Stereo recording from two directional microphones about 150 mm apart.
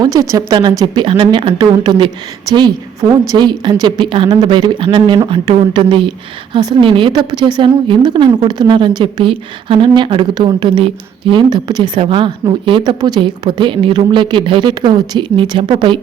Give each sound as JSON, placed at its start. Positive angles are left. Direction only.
{"t": 0.0, "sound": "a woman's voice", "side_deg": -25}